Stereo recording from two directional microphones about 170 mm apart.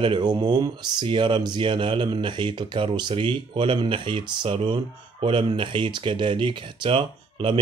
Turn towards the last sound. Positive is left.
turn(degrees=-30)  # may be behind; listen again after turning